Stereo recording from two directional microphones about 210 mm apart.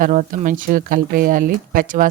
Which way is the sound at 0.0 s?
35° right (ahead or behind).